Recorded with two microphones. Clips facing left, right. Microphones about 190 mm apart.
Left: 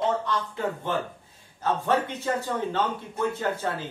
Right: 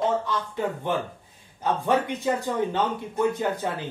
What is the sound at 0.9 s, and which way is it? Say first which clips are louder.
A man's voice: right 1 dB; 15° right (ahead or behind).